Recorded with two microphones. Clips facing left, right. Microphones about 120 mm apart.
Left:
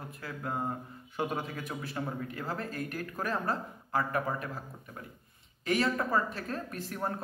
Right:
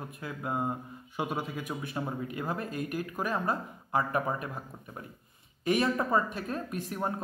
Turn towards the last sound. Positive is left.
turn(degrees=-15)  # may be behind; listen again after turning